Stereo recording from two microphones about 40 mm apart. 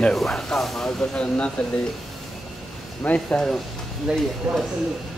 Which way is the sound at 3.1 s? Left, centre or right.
Left.